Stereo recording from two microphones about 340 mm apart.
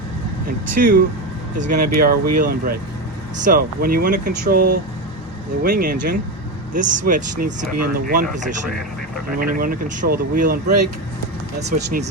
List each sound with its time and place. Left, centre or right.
0.8 s speech: right
11.6 s speech: right